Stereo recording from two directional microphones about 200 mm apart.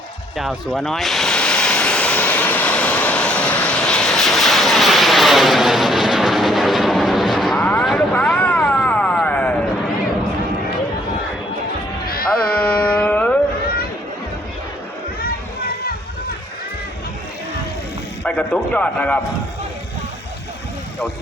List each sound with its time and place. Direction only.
0.3 s vehicle: centre (ahead or behind)
12.0 s music: 50° left (ahead or behind)
12.5 s music: 5° left (ahead or behind)
18.2 s a man's voice: 5° left (ahead or behind)